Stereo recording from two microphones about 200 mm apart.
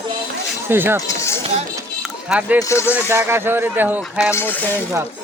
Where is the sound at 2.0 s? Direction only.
5° right (ahead or behind).